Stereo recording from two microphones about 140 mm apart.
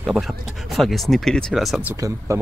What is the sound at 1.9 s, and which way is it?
Speech, 25° right (ahead or behind).